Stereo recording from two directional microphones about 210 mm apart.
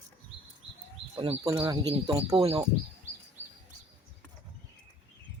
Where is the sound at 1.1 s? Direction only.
25° right (ahead or behind).